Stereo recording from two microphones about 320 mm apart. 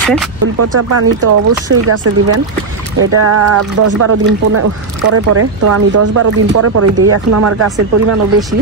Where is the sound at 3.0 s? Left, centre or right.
Right.